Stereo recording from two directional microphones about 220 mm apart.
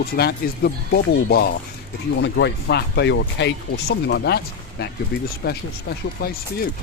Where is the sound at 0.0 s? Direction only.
45° left (ahead or behind).